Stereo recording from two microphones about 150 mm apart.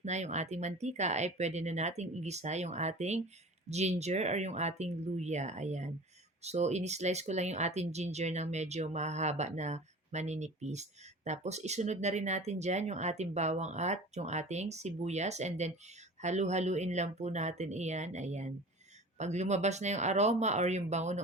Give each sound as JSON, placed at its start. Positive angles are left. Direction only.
{"t": 0.0, "sound": "speech", "side_deg": -50}